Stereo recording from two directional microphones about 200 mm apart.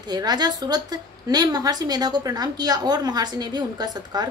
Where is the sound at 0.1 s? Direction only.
20° right (ahead or behind).